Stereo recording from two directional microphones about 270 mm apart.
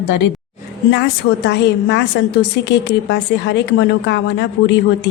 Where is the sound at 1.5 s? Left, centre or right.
Left.